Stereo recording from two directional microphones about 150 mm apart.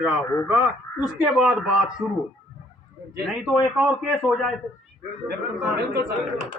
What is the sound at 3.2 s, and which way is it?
Speech, centre (ahead or behind).